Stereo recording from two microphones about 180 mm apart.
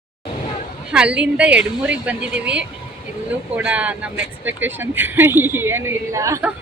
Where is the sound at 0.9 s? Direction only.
5° right (ahead or behind).